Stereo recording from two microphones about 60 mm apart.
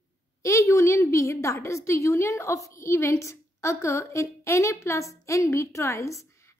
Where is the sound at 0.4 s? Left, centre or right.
Left.